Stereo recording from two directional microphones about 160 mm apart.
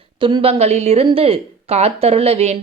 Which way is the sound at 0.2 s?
30° right (ahead or behind).